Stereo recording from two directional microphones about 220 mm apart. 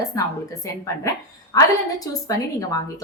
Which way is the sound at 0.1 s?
15° left (ahead or behind).